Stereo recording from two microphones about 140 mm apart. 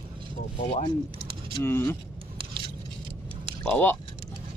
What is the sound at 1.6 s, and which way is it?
Speech, 15° left (ahead or behind).